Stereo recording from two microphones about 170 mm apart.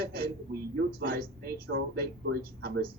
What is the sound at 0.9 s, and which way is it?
Speech, 65° right (ahead or behind).